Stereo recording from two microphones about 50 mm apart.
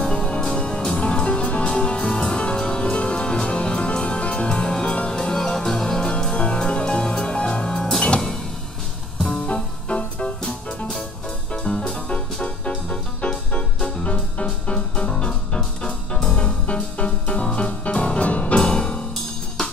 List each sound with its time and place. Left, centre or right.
0.0 s music: centre
9.5 s music: left
11.5 s music: left